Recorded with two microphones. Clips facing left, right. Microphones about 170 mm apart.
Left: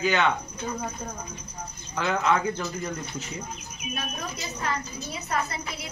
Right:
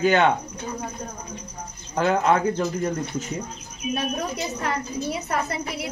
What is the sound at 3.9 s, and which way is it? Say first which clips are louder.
A woman's voice: right 8 dB; 70° right (ahead or behind).